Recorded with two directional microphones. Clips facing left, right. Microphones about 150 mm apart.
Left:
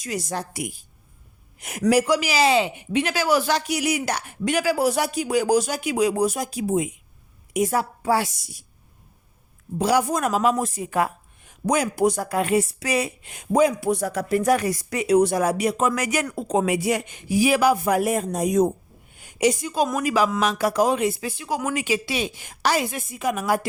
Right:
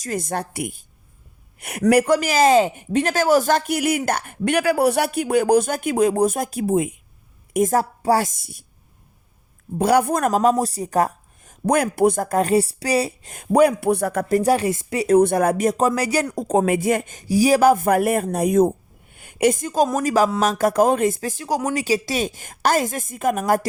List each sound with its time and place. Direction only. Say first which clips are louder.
0.0 s speech: right 3 dB; 50° right (ahead or behind)
7.5 s speech: right 4 dB; 45° right (ahead or behind)
9.7 s speech: right 3 dB; 55° right (ahead or behind)
13.5 s speech: right 3 dB; 65° right (ahead or behind)
14.3 s speech: right 2 dB; 30° right (ahead or behind)
15.0 s speech: right 3 dB; 50° right (ahead or behind)
15.9 s speech: right 3 dB; 35° right (ahead or behind)